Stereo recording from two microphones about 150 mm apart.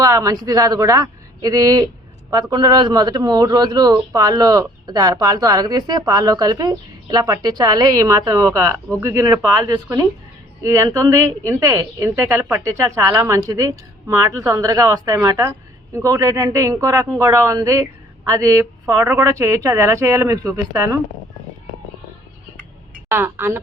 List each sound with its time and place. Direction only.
0.0 s a man's voice: 20° right (ahead or behind)
23.0 s a woman's voice: 15° right (ahead or behind)